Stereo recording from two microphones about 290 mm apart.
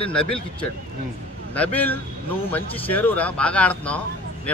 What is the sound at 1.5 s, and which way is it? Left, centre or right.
Speech, centre.